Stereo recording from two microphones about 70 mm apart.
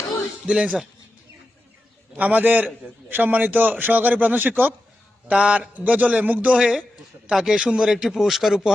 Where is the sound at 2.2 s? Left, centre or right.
Right.